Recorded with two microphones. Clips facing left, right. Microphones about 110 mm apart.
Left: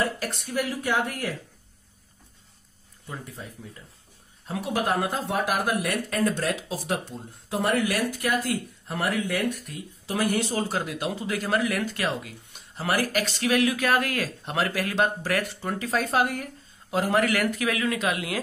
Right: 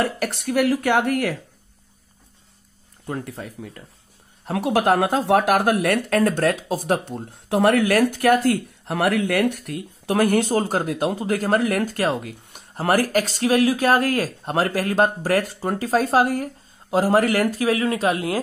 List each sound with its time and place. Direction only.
0.0 s speech: 75° right (ahead or behind)
3.1 s speech: 70° right (ahead or behind); by 18.4 s 35° right (ahead or behind)